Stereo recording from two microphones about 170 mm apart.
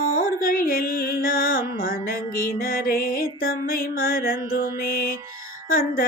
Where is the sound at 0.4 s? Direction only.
55° left (ahead or behind).